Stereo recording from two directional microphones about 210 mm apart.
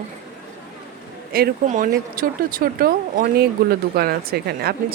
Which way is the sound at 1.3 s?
45° right (ahead or behind).